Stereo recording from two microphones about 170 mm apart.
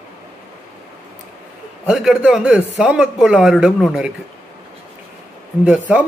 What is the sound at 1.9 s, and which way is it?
Speech, 5° right (ahead or behind).